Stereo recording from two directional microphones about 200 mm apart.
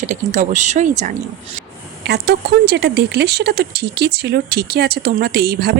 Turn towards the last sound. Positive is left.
turn(degrees=-50)  # may be behind; listen again after turning